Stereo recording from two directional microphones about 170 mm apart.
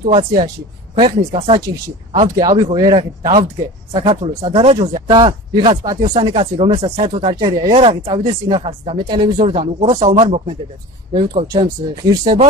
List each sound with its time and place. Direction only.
0.0 s speech: 35° right (ahead or behind)
2.1 s speech: 25° right (ahead or behind)
3.2 s speech: 40° right (ahead or behind)
3.9 s speech: 25° right (ahead or behind)
11.5 s speech: 25° right (ahead or behind)